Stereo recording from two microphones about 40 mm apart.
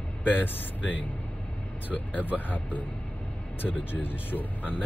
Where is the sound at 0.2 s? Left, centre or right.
Left.